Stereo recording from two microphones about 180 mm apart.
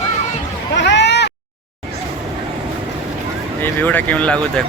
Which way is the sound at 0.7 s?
75° left (ahead or behind).